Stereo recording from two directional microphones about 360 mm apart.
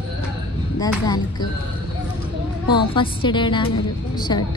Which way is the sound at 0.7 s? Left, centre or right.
Centre.